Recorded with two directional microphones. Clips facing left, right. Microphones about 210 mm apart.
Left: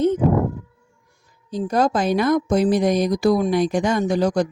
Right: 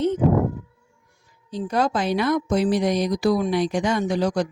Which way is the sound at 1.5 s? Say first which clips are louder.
Left 3 dB; 45° left (ahead or behind).